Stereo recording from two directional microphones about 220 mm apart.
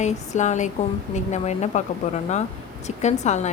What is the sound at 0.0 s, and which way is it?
Speech, 30° left (ahead or behind).